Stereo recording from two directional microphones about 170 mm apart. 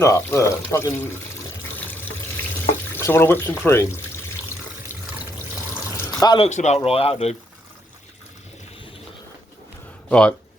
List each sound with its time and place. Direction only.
0.0 s speech: 15° left (ahead or behind)
2.9 s speech: 15° left (ahead or behind)
6.0 s water: 20° left (ahead or behind)
6.3 s a man's voice: 40° left (ahead or behind)
10.1 s speech: 5° left (ahead or behind)